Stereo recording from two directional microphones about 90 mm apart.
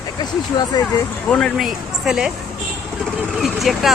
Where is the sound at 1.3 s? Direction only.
10° left (ahead or behind).